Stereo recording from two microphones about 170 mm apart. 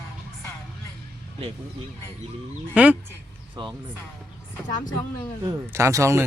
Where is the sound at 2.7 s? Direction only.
10° right (ahead or behind).